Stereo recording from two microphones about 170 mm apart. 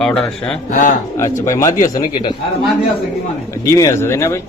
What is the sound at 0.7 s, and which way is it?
Speech, 50° left (ahead or behind).